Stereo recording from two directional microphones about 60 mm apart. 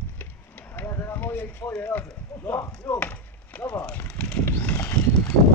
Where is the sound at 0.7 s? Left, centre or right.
Left.